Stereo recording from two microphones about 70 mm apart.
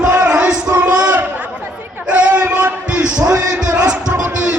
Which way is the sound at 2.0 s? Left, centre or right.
Centre.